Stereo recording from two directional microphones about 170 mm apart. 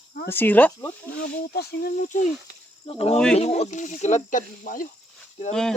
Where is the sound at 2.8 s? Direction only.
35° left (ahead or behind); by 4.9 s 50° left (ahead or behind).